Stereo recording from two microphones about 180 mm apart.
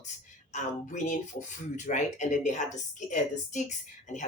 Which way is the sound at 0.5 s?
40° left (ahead or behind).